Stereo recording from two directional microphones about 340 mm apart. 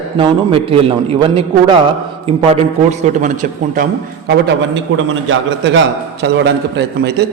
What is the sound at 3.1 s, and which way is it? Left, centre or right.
A man's voice, right.